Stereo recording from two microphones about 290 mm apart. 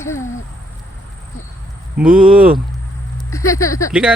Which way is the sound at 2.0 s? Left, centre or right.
Centre.